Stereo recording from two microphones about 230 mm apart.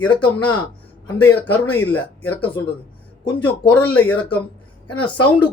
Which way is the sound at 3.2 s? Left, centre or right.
Centre.